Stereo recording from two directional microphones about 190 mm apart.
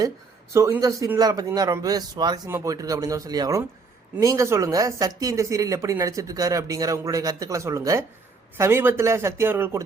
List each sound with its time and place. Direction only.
0.5 s a man's voice: 15° right (ahead or behind)